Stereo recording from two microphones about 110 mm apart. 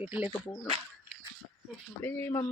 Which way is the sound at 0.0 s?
15° right (ahead or behind).